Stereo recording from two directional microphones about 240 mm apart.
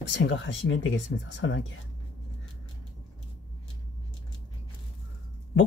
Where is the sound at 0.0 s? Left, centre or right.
Left.